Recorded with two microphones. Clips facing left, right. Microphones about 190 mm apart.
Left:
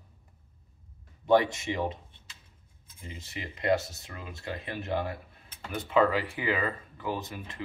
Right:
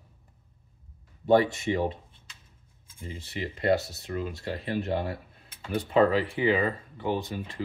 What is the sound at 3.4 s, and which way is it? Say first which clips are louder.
Speech: right 2 dB; 35° right (ahead or behind).